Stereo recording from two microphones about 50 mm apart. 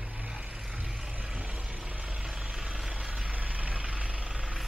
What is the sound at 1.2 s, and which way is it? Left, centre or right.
Vehicle, right.